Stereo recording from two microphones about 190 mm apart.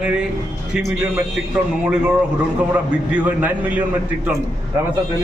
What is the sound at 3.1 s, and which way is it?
Speech, 5° right (ahead or behind).